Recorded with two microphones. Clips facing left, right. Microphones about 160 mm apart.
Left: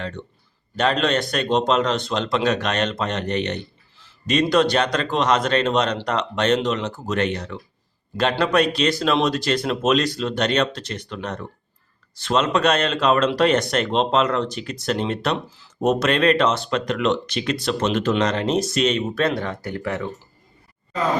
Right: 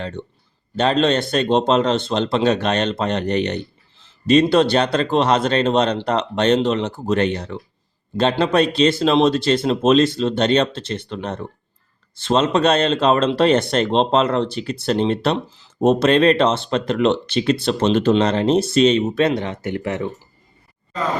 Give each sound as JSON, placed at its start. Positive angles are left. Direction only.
{"t": 0.8, "sound": "a man's voice", "side_deg": -30}